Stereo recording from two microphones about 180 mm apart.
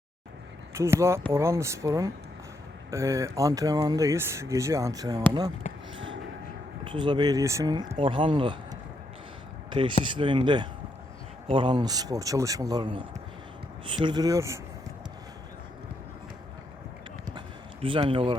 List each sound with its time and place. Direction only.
0.7 s speech: 15° right (ahead or behind)
6.8 s speech: 25° right (ahead or behind)
17.3 s a sound: 30° right (ahead or behind)